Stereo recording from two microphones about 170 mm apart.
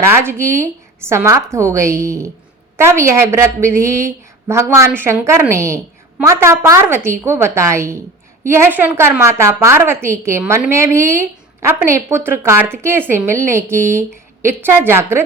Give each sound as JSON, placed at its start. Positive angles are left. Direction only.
{"t": 0.0, "sound": "a woman's voice", "side_deg": -15}